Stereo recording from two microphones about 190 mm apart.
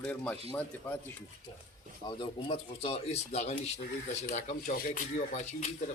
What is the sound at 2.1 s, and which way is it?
Speech, 25° left (ahead or behind).